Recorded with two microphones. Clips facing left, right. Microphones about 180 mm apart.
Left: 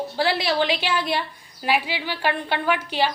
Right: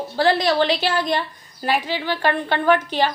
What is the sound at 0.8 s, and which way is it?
Speech, 45° right (ahead or behind).